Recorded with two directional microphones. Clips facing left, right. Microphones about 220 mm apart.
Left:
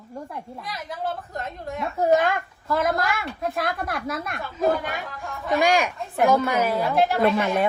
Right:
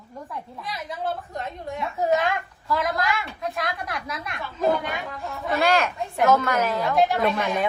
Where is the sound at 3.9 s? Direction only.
45° left (ahead or behind).